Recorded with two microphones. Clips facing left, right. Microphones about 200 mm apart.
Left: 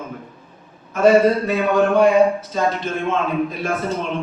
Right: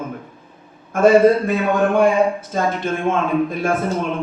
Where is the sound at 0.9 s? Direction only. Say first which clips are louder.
Right 2 dB; 50° right (ahead or behind).